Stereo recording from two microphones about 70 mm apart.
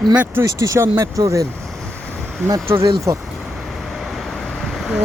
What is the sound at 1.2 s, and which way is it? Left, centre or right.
Speech, right.